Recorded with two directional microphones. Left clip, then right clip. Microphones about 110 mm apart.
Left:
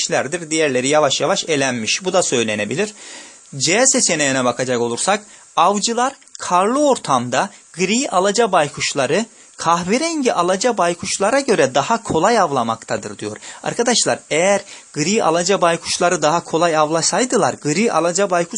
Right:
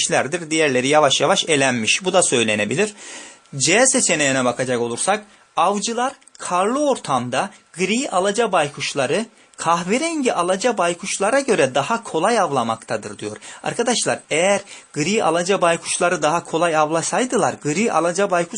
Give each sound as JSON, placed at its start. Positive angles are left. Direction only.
{"t": 0.0, "sound": "speech", "side_deg": 5}